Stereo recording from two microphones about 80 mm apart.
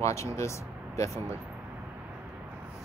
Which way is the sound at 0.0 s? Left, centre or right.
Left.